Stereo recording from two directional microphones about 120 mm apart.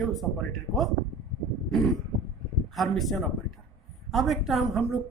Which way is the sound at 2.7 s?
Centre (ahead or behind).